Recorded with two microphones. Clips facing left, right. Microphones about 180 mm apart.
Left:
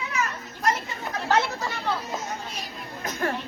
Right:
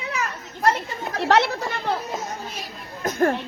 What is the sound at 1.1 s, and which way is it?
Chatter, 75° right (ahead or behind).